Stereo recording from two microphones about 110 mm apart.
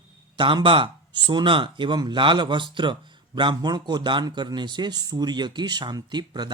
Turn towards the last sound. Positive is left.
turn(degrees=-40)  # may be behind; listen again after turning